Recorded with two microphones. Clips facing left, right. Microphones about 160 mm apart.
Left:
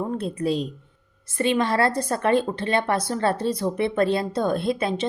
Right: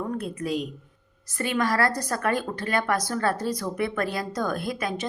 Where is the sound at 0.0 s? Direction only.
30° left (ahead or behind).